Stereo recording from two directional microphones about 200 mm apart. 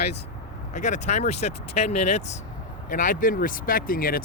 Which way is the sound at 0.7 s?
35° left (ahead or behind).